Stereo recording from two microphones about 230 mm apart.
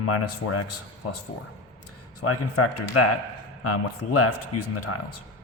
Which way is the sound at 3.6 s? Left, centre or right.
Left.